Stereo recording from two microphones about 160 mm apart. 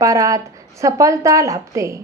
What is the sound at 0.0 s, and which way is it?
A woman's voice, 20° right (ahead or behind).